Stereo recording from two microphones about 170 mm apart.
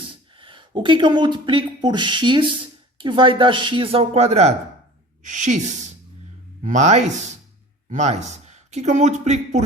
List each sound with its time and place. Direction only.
0.3 s a woman's voice: 30° right (ahead or behind)